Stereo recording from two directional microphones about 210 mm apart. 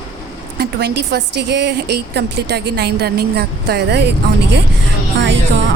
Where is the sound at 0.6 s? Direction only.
50° right (ahead or behind).